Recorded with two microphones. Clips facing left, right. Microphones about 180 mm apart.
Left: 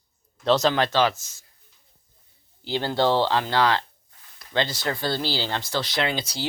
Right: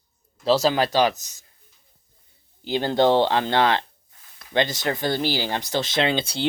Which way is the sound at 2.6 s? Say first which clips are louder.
Right 3 dB; 20° right (ahead or behind).